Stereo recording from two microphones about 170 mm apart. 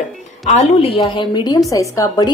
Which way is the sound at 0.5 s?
35° left (ahead or behind).